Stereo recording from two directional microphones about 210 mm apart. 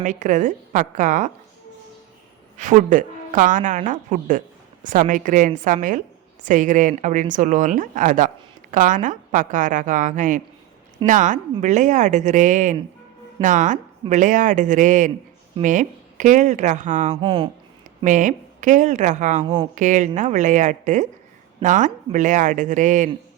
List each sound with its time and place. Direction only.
0.0 s a woman's voice: 35° right (ahead or behind)
2.6 s a woman's voice: 35° right (ahead or behind)
17.2 s speech: 25° right (ahead or behind)
18.0 s a woman's voice: 35° right (ahead or behind)